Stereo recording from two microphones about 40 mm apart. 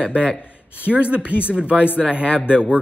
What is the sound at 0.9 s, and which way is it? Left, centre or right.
Speech, right.